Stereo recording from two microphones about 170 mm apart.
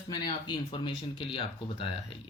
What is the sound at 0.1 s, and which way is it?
Speech, 25° left (ahead or behind).